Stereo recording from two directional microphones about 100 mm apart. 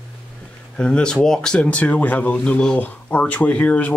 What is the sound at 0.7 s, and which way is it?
Speech, 10° left (ahead or behind).